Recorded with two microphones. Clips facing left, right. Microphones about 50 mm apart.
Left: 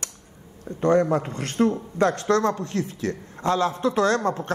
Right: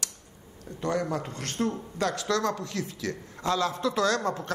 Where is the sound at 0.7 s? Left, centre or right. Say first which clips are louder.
Left 9 dB; left.